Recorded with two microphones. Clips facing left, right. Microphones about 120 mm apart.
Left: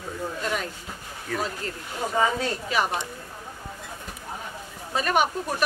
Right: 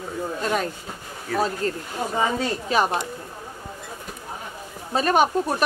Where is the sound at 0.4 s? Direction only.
45° right (ahead or behind).